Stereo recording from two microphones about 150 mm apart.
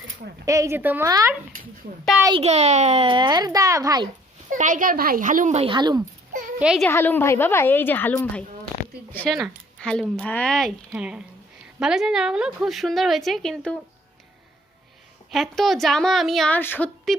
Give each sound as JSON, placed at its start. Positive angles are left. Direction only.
{"t": 0.4, "sound": "speech", "side_deg": -20}
{"t": 2.4, "sound": "a child's voice", "side_deg": -45}
{"t": 4.5, "sound": "speech", "side_deg": -60}
{"t": 5.5, "sound": "a child's voice", "side_deg": -35}
{"t": 6.6, "sound": "a woman's voice", "side_deg": -5}
{"t": 6.8, "sound": "a woman's voice", "side_deg": 10}
{"t": 15.3, "sound": "a woman's voice", "side_deg": 0}
{"t": 16.6, "sound": "a woman's voice", "side_deg": 15}